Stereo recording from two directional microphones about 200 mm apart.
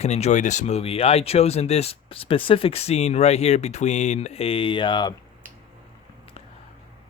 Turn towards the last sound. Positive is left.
turn(degrees=25)  # may be behind; listen again after turning